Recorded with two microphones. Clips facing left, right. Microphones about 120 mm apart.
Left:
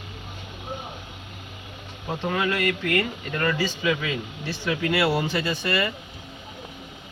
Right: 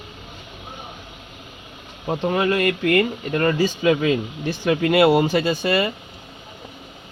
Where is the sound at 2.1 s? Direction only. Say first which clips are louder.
Right 5 dB; 35° right (ahead or behind).